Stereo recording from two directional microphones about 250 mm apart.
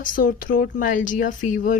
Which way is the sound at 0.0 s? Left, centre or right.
Left.